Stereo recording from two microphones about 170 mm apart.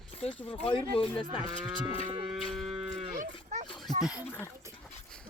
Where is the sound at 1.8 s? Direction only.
30° right (ahead or behind).